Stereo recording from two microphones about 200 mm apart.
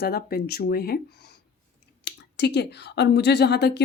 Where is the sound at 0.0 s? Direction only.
50° left (ahead or behind).